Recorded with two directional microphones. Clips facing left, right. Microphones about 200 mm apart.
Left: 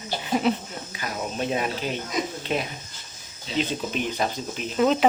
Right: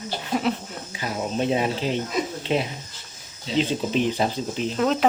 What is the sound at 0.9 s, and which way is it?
Speech, 25° right (ahead or behind).